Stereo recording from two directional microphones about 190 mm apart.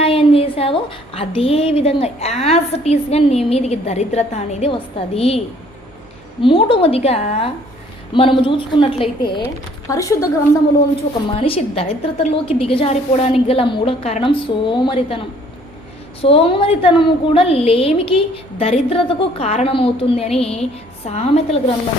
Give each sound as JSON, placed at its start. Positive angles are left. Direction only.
{"t": 0.0, "sound": "a woman's voice", "side_deg": 30}
{"t": 6.4, "sound": "a woman's voice", "side_deg": 30}
{"t": 11.3, "sound": "a woman's voice", "side_deg": 30}
{"t": 16.2, "sound": "a woman's voice", "side_deg": 30}